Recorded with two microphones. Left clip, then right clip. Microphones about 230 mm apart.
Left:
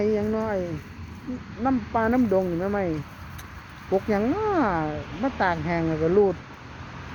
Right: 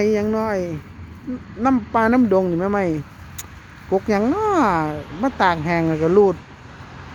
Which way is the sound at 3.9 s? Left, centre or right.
Right.